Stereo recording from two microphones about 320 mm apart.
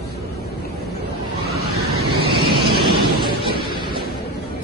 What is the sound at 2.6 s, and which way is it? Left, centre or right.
Vehicle, centre.